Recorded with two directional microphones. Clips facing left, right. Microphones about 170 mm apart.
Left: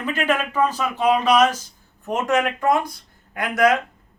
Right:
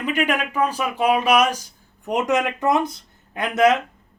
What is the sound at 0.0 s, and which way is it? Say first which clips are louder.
Speech: even; 15° right (ahead or behind).